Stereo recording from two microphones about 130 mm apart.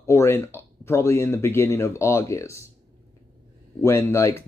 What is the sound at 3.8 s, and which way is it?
Speech, 20° left (ahead or behind).